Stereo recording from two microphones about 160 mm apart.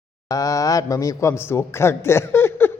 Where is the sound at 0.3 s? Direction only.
20° left (ahead or behind).